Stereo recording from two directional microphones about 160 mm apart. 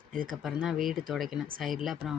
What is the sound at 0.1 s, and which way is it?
Speech, 60° right (ahead or behind).